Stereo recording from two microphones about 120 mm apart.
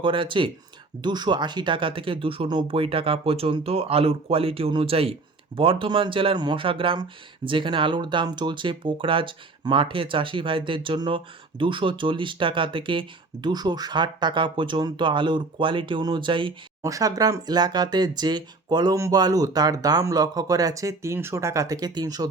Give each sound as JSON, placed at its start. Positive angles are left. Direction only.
{"t": 0.0, "sound": "speech", "side_deg": -45}
{"t": 16.8, "sound": "speech", "side_deg": -30}